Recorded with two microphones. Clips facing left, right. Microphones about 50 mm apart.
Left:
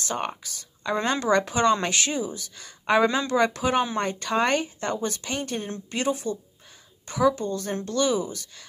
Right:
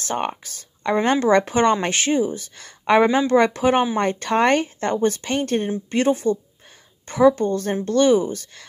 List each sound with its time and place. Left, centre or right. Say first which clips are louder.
0.0 s speech: right 5 dB; right